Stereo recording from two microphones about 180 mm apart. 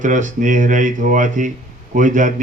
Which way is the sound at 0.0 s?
45° right (ahead or behind).